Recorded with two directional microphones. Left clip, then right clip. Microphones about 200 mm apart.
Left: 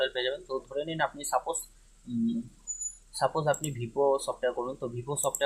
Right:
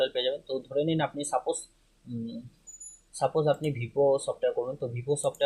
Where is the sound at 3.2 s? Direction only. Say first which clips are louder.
Right 2 dB; 15° right (ahead or behind).